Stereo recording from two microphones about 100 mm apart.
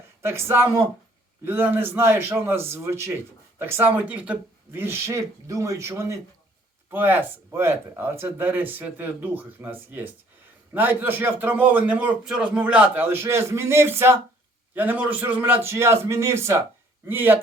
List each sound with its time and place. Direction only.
0.2 s a man's voice: 25° right (ahead or behind)